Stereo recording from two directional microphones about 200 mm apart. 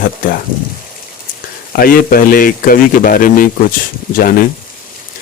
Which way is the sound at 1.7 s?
45° left (ahead or behind).